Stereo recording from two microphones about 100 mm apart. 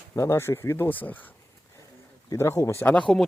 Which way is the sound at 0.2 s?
25° left (ahead or behind).